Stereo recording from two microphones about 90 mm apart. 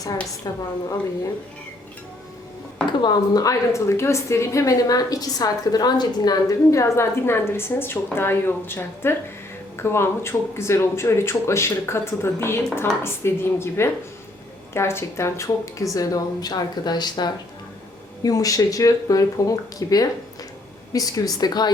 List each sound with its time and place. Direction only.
0.4 s a woman's voice: 45° left (ahead or behind)
3.0 s a woman's voice: 50° left (ahead or behind)
18.2 s a woman's voice: 40° left (ahead or behind)